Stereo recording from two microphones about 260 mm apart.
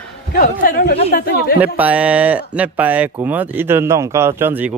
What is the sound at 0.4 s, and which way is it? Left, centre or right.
Speech, left.